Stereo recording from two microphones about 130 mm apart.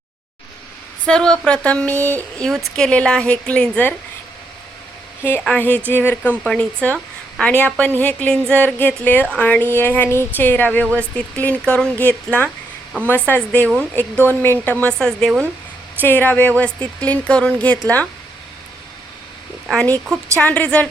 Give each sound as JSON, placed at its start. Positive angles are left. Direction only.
{"t": 1.0, "sound": "speech", "side_deg": 5}
{"t": 2.4, "sound": "speech", "side_deg": 0}
{"t": 5.2, "sound": "a woman's voice", "side_deg": 15}
{"t": 13.6, "sound": "speech", "side_deg": -15}
{"t": 13.9, "sound": "speech", "side_deg": 15}
{"t": 19.7, "sound": "speech", "side_deg": 10}